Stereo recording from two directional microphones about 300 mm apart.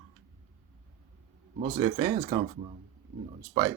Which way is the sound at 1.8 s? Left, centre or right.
Centre.